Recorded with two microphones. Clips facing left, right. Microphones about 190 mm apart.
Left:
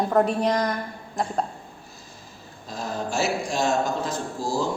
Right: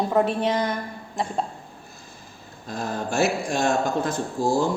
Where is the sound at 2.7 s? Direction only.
55° right (ahead or behind).